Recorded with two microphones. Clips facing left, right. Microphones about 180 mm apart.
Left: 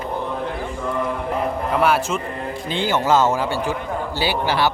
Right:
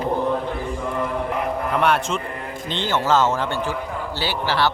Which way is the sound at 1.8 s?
5° left (ahead or behind).